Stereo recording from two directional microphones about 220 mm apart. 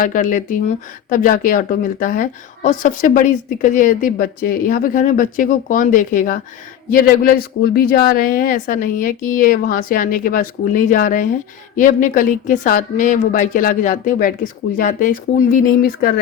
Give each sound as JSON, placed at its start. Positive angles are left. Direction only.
{"t": 0.0, "sound": "a woman's voice", "side_deg": 35}